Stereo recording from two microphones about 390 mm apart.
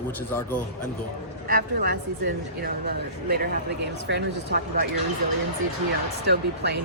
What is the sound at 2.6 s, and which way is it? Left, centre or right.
Speech, right.